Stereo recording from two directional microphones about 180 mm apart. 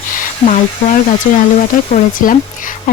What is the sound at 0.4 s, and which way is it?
Speech, 40° left (ahead or behind).